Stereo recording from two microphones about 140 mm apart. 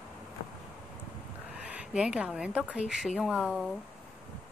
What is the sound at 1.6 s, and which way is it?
A woman's voice, 10° right (ahead or behind).